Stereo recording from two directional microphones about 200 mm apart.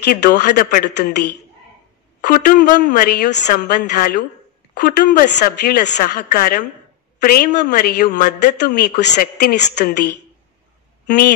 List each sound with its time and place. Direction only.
0.3 s speech: 40° left (ahead or behind)
2.2 s a woman's voice: 40° left (ahead or behind)
5.6 s a woman's voice: 55° left (ahead or behind)